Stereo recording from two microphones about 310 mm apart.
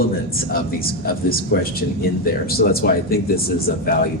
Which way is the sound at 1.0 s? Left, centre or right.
Left.